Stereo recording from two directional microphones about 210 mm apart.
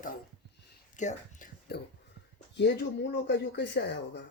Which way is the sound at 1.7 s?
50° left (ahead or behind).